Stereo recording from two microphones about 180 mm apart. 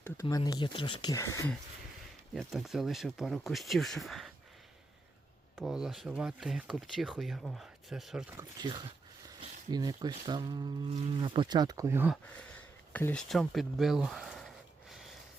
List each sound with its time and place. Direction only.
0.0 s speech: 20° left (ahead or behind)
2.3 s speech: centre (ahead or behind)
5.5 s speech: 5° right (ahead or behind)
8.4 s speech: 25° right (ahead or behind)
12.9 s a sound: 10° left (ahead or behind)